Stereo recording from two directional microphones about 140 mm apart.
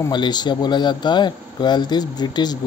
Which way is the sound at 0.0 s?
30° left (ahead or behind).